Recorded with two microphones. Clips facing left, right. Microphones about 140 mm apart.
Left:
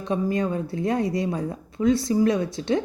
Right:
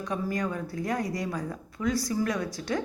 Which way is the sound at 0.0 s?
25° left (ahead or behind).